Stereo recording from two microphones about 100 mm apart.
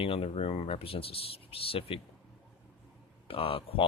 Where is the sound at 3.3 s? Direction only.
65° left (ahead or behind).